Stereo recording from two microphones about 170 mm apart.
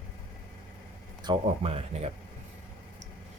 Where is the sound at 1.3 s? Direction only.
35° right (ahead or behind).